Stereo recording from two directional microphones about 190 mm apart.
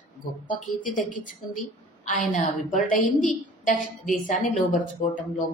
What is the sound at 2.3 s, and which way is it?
A woman's voice, 45° left (ahead or behind).